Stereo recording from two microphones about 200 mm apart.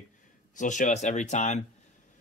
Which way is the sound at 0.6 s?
40° left (ahead or behind).